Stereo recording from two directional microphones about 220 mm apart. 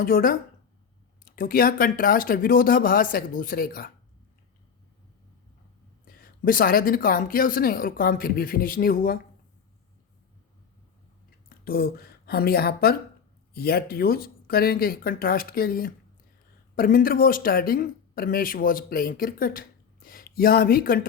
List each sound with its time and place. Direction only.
0.0 s speech: 40° left (ahead or behind)
6.1 s speech: 40° left (ahead or behind)
11.4 s speech: 45° left (ahead or behind)